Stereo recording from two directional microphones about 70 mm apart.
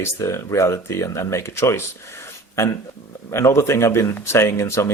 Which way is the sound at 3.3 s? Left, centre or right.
Left.